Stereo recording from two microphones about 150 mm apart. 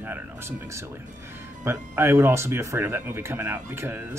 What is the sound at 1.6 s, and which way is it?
Speech, 15° right (ahead or behind).